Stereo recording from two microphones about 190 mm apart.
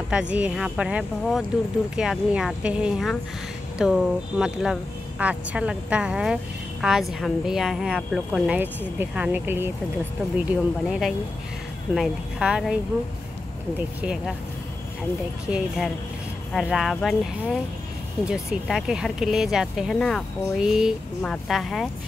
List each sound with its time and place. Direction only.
0.1 s a woman's voice: 5° right (ahead or behind)
13.7 s a woman's voice: 5° right (ahead or behind)
15.5 s a woman's voice: centre (ahead or behind)
18.3 s a woman's voice: 5° right (ahead or behind)